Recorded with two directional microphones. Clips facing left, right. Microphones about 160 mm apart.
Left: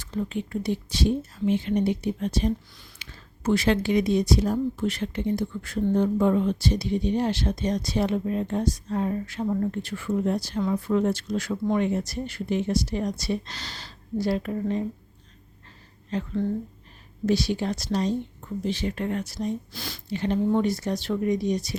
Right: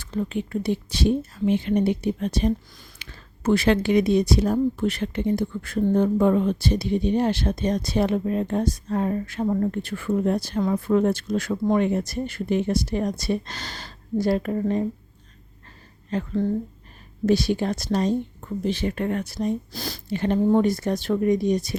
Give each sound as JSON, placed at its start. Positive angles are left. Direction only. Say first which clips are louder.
{"t": 0.0, "sound": "speech", "louder": "right 2 dB", "side_deg": -65}
{"t": 16.1, "sound": "speech", "louder": "right 3 dB", "side_deg": -50}
{"t": 19.7, "sound": "speech", "louder": "right 3 dB", "side_deg": -40}